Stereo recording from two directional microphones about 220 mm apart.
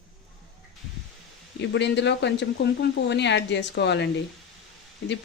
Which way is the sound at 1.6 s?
55° left (ahead or behind).